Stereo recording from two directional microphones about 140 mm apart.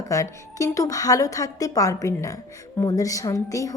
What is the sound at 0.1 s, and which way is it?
A woman's voice, 25° left (ahead or behind).